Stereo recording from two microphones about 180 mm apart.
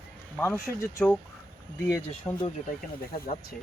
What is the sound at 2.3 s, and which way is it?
Speech, 15° left (ahead or behind).